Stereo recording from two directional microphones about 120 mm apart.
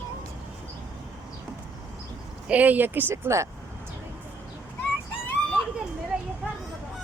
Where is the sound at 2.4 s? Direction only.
15° right (ahead or behind).